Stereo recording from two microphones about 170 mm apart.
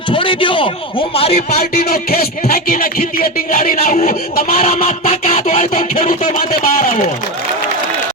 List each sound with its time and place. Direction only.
0.1 s a man's voice: 30° left (ahead or behind)
1.5 s music: 60° left (ahead or behind)